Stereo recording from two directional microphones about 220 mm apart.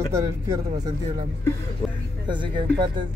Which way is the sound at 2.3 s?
20° right (ahead or behind).